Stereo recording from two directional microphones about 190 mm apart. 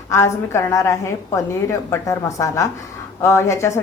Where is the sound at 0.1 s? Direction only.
15° left (ahead or behind).